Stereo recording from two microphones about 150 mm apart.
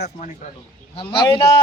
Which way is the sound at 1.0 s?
35° left (ahead or behind).